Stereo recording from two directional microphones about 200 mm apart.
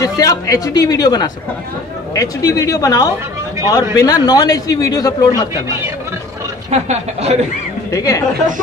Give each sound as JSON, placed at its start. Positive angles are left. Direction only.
{"t": 0.0, "sound": "a man's voice", "side_deg": 15}
{"t": 6.7, "sound": "speech", "side_deg": -35}
{"t": 7.9, "sound": "speech", "side_deg": 15}